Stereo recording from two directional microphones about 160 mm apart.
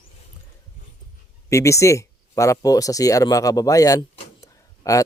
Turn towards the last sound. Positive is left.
turn(degrees=20)  # may be behind; listen again after turning